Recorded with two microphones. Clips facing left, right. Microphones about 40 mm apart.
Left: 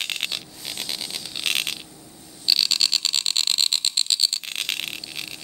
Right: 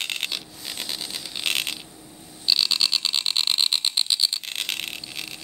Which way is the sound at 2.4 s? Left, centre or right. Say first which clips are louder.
Even; centre.